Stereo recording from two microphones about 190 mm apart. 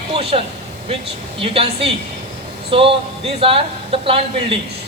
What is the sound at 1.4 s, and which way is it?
A woman's voice, 30° right (ahead or behind).